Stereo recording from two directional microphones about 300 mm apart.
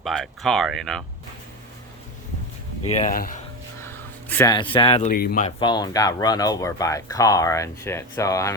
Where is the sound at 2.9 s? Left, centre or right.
Left.